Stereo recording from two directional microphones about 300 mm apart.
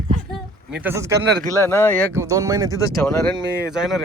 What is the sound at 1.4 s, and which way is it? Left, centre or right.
Speech, centre.